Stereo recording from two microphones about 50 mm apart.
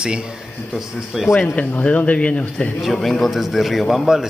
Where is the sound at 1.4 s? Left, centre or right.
Left.